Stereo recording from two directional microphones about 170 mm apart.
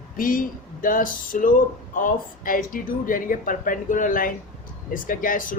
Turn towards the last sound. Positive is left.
turn(degrees=55)  # may be behind; listen again after turning